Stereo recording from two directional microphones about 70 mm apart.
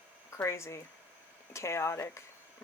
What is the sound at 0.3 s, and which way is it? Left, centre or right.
Speech, left.